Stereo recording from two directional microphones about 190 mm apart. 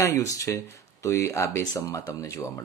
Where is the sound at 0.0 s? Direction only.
15° left (ahead or behind).